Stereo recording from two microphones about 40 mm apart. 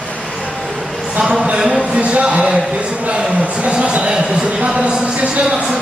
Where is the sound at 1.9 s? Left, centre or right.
Right.